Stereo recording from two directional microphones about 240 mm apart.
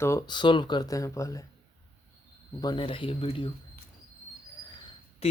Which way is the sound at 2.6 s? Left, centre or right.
Centre.